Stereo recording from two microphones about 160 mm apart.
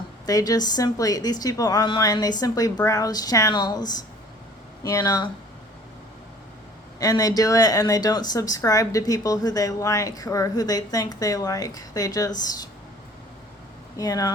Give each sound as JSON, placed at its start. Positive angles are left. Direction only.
{"t": 0.3, "sound": "speech", "side_deg": 25}
{"t": 7.0, "sound": "speech", "side_deg": 25}
{"t": 13.9, "sound": "speech", "side_deg": 20}